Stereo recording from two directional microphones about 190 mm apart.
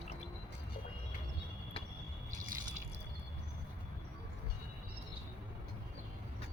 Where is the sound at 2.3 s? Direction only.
40° right (ahead or behind).